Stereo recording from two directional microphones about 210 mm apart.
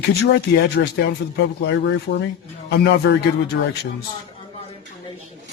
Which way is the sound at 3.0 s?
60° left (ahead or behind).